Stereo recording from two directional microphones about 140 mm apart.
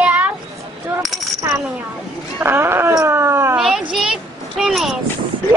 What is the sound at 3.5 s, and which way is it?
A child's voice, 5° right (ahead or behind).